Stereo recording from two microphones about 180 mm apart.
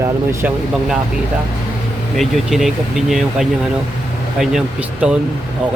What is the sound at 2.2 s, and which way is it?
Speech, centre (ahead or behind).